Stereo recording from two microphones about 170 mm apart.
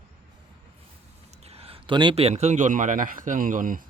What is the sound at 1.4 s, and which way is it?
Speech, 35° right (ahead or behind).